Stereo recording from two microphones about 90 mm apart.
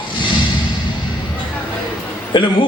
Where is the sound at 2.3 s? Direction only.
65° left (ahead or behind).